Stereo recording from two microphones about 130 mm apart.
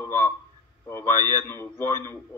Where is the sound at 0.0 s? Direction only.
15° left (ahead or behind).